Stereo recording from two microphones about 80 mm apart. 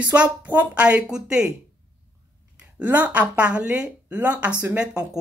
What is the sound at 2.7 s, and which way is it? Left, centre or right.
Speech, centre.